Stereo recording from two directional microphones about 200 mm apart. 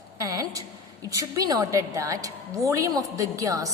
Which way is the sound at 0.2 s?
15° right (ahead or behind).